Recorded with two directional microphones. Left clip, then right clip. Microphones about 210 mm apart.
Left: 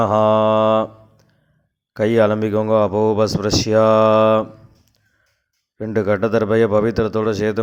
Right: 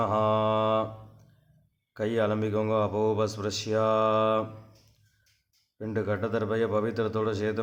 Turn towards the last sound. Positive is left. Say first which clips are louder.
# left 10 dB
turn(degrees=30)  # may be behind; listen again after turning